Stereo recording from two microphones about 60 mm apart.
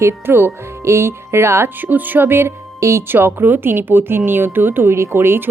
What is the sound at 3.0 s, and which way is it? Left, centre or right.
A woman's voice, right.